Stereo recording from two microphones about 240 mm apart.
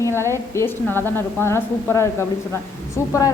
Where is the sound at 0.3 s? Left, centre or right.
Centre.